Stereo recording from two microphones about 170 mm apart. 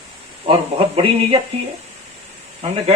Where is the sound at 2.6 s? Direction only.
35° right (ahead or behind).